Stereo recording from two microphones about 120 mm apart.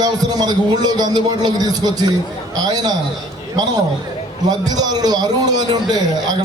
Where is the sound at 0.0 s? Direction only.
30° right (ahead or behind).